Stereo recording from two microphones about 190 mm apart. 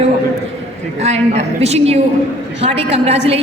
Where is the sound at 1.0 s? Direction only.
35° right (ahead or behind).